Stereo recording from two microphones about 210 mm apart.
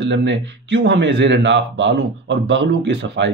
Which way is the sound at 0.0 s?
60° right (ahead or behind).